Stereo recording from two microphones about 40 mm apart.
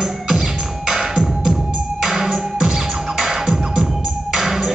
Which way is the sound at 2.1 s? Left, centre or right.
Centre.